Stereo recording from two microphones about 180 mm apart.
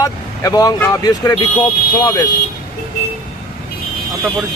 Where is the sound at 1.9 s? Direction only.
20° left (ahead or behind).